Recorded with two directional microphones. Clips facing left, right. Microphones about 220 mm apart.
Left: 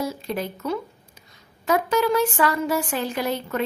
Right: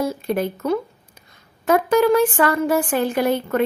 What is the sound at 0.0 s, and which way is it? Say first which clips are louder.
A woman's voice: right 6 dB; 55° right (ahead or behind).